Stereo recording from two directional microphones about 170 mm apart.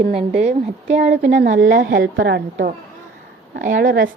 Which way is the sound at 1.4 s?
85° right.